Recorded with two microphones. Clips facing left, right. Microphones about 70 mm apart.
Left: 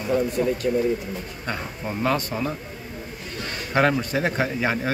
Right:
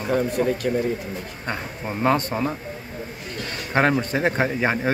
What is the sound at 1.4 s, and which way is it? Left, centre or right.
A man's voice, right.